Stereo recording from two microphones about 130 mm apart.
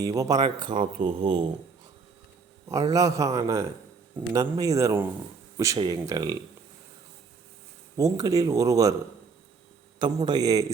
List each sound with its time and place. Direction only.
0.0 s a man's voice: 25° right (ahead or behind)
2.6 s a man's voice: 25° right (ahead or behind)
7.9 s a man's voice: 30° right (ahead or behind)
10.0 s a man's voice: 35° right (ahead or behind)